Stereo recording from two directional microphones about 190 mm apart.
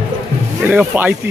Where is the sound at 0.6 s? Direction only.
10° right (ahead or behind).